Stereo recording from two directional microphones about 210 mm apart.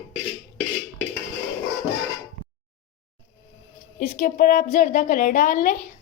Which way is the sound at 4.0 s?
40° left (ahead or behind).